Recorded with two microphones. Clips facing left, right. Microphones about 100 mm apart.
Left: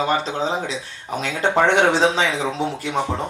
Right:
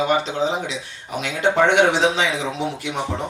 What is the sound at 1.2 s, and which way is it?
Speech, 40° left (ahead or behind).